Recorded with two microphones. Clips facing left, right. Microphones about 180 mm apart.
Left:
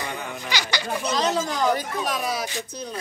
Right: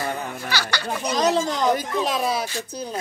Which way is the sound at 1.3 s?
25° right (ahead or behind).